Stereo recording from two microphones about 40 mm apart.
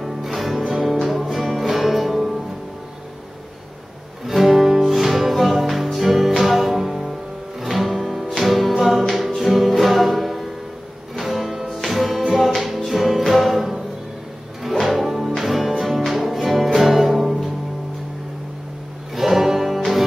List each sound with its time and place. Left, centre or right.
0.0 s music: centre
4.3 s music: centre
12.2 s music: centre
12.4 s music: centre
19.1 s music: centre